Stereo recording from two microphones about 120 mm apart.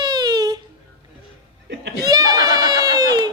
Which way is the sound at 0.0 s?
35° right (ahead or behind).